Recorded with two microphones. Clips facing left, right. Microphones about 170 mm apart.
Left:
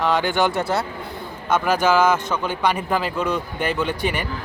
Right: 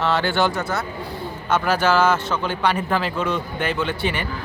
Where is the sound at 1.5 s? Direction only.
10° left (ahead or behind).